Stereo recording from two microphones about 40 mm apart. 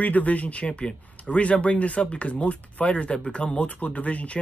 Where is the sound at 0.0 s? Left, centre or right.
Left.